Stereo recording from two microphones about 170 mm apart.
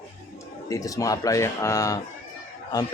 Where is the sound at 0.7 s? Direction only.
20° left (ahead or behind).